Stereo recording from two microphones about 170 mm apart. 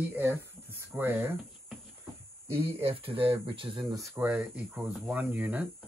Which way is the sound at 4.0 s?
10° right (ahead or behind).